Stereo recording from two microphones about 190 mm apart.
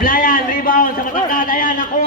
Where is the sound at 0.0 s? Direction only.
45° left (ahead or behind).